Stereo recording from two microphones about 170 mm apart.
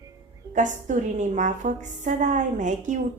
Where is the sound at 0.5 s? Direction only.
45° right (ahead or behind).